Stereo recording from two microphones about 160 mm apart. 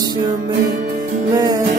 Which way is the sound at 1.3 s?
20° right (ahead or behind).